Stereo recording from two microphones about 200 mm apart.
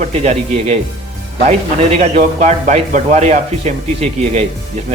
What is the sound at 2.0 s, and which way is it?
Speech, 35° right (ahead or behind).